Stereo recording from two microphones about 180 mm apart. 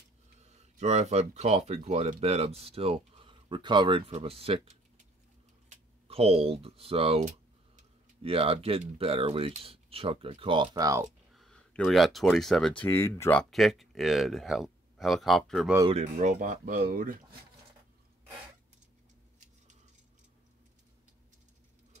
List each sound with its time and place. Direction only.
0.4 s speech: 40° right (ahead or behind); by 11.1 s 20° right (ahead or behind)
11.3 s speech: 5° left (ahead or behind)
15.9 s speech: 35° right (ahead or behind)